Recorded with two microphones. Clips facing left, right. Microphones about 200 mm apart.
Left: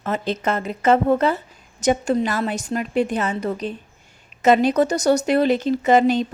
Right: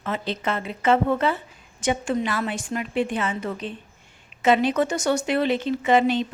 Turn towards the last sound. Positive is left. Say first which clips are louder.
# left 3 dB
turn(degrees=40)  # may be behind; listen again after turning